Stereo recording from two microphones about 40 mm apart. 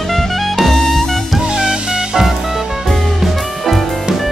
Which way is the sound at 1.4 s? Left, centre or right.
Centre.